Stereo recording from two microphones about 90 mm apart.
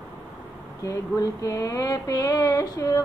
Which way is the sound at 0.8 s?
40° left (ahead or behind).